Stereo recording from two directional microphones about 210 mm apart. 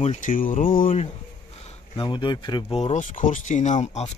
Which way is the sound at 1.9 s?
20° left (ahead or behind).